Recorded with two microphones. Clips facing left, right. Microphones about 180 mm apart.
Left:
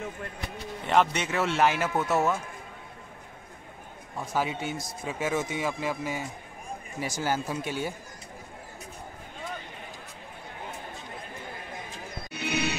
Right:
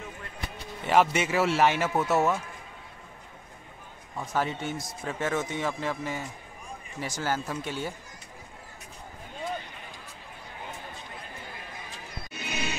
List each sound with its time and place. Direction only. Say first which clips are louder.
0.8 s speech: right 2 dB; 5° right (ahead or behind)
4.2 s speech: even; 5° left (ahead or behind)
12.3 s music: left 5 dB; 70° left (ahead or behind)